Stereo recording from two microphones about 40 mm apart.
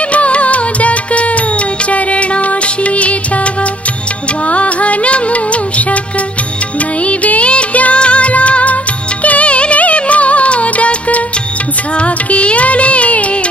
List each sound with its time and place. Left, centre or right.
0.1 s music: left
4.5 s music: left
7.1 s music: left